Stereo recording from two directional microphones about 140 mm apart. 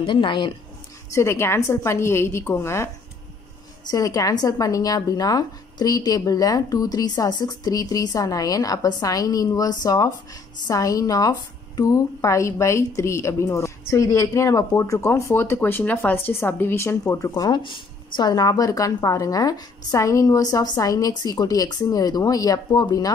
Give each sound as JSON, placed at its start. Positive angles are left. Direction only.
{"t": 0.0, "sound": "a woman's voice", "side_deg": 35}
{"t": 1.1, "sound": "a woman's voice", "side_deg": 20}